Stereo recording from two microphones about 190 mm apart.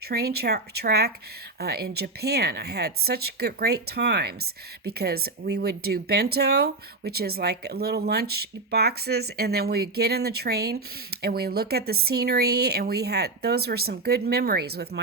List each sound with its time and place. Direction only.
0.1 s speech: 55° right (ahead or behind)